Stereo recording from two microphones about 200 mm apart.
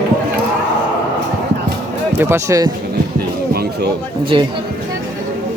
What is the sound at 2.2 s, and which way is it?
Speech, 15° right (ahead or behind).